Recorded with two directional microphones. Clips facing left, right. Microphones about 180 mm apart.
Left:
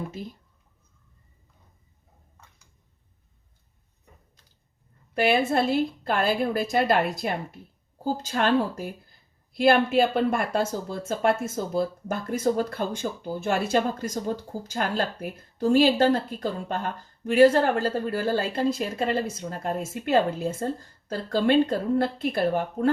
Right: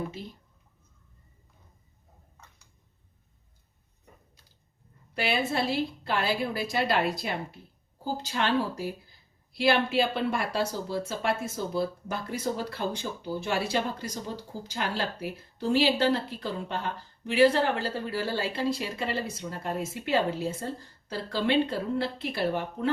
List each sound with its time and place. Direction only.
5.1 s a woman's voice: 50° left (ahead or behind)